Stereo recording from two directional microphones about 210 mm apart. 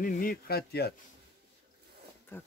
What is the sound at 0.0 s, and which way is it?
Speech, 40° left (ahead or behind).